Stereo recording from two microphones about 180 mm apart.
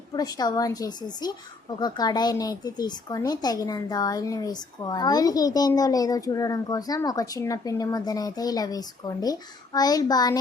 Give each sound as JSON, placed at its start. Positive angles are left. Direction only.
{"t": 0.1, "sound": "a woman's voice", "side_deg": 20}